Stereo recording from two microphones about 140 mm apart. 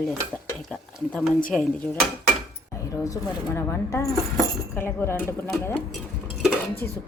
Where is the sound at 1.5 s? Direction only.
5° left (ahead or behind).